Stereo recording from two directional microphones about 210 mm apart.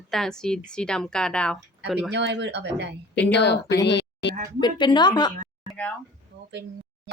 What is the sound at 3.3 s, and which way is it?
Speech, 55° left (ahead or behind).